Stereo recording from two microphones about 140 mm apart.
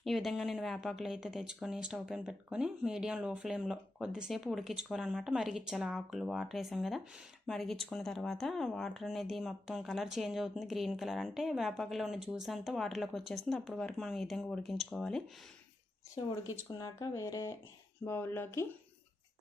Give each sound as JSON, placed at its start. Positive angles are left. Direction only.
{"t": 0.0, "sound": "speech", "side_deg": 0}
{"t": 16.2, "sound": "speech", "side_deg": 30}